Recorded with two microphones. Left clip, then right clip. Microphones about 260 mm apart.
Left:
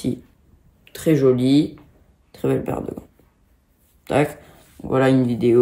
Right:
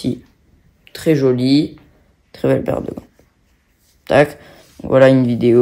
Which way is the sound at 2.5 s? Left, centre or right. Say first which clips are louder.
Right 6 dB; right.